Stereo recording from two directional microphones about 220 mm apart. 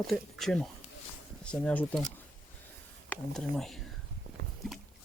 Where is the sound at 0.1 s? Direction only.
Centre (ahead or behind).